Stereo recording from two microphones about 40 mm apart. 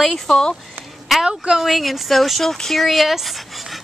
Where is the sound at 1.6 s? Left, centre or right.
Centre.